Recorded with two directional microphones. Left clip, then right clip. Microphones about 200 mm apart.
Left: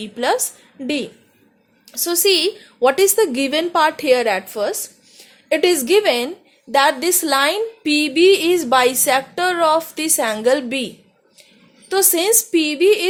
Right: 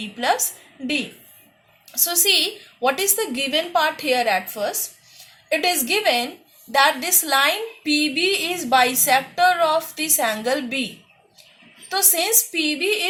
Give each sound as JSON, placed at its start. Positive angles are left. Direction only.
{"t": 0.0, "sound": "a woman's voice", "side_deg": 55}
{"t": 2.0, "sound": "a woman's voice", "side_deg": 55}